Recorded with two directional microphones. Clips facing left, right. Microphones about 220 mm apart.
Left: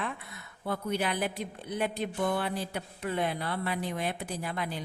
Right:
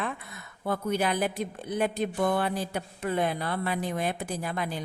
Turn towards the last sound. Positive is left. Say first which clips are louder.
# right 3 dB
turn(degrees=-45)  # may be behind; listen again after turning